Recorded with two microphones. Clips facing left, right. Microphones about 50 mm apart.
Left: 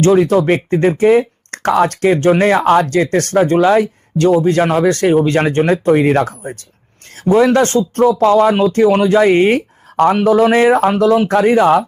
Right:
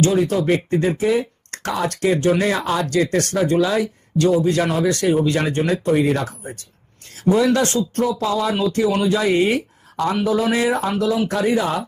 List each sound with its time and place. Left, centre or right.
0.0 s speech: left